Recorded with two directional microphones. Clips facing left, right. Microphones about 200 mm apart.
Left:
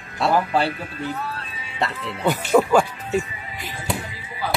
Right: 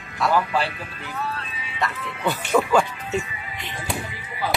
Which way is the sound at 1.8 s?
25° left (ahead or behind).